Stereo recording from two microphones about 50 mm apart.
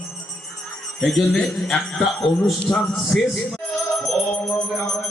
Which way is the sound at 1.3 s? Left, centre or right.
Centre.